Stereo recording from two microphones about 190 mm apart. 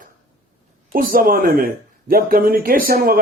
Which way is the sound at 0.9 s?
50° right (ahead or behind).